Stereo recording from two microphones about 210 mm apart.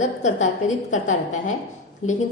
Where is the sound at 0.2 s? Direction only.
35° left (ahead or behind).